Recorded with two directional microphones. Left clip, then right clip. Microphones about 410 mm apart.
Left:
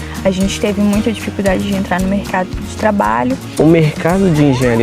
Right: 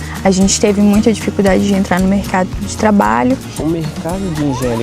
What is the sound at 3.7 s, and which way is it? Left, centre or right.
Speech, left.